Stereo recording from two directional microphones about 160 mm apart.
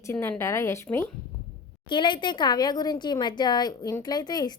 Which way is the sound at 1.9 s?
30° left (ahead or behind).